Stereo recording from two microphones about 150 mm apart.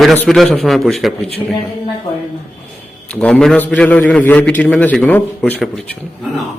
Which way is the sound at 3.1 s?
5° left (ahead or behind).